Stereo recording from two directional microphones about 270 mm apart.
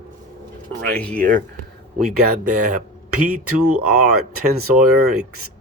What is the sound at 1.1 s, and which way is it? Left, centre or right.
Speech, right.